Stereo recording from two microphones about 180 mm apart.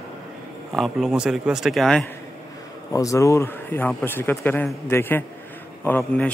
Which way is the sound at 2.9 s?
15° left (ahead or behind).